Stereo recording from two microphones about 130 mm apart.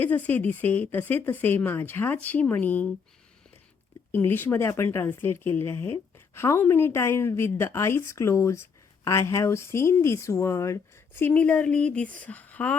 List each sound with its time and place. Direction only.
0.0 s speech: 15° left (ahead or behind)
4.1 s speech: 15° left (ahead or behind)